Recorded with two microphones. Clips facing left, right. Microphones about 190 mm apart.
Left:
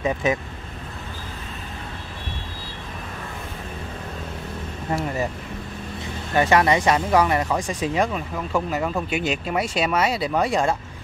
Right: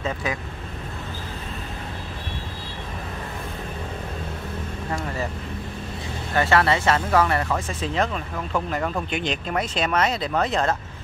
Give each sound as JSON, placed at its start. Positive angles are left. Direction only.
{"t": 0.0, "sound": "speech", "side_deg": 20}
{"t": 6.3, "sound": "speech", "side_deg": 15}